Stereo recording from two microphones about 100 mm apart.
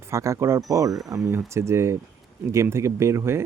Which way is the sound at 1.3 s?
25° right (ahead or behind).